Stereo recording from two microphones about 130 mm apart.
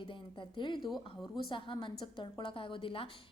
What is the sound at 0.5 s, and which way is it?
A woman's voice, 35° left (ahead or behind).